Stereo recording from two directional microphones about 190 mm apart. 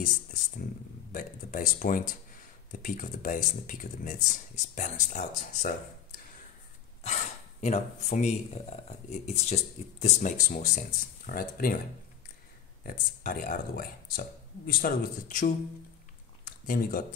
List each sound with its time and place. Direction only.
1.1 s speech: 45° left (ahead or behind)
7.0 s speech: 35° left (ahead or behind)
12.8 s speech: 50° left (ahead or behind)
16.4 s a sound: 45° left (ahead or behind)